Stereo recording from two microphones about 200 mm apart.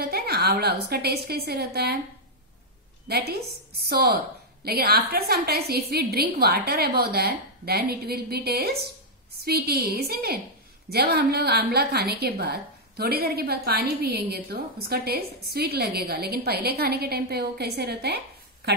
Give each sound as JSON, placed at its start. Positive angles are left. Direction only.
{"t": 0.0, "sound": "a woman's voice", "side_deg": -50}
{"t": 3.1, "sound": "a woman's voice", "side_deg": -50}
{"t": 4.6, "sound": "a woman's voice", "side_deg": -50}